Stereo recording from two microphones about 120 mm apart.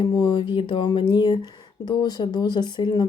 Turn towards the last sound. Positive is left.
turn(degrees=40)  # may be behind; listen again after turning